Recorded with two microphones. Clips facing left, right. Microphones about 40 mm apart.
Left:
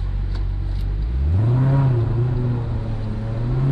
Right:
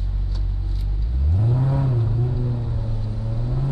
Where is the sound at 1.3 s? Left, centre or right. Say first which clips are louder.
Left 3 dB; left.